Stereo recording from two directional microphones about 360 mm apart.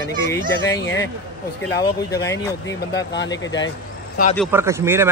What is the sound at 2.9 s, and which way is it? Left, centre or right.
Speech, left.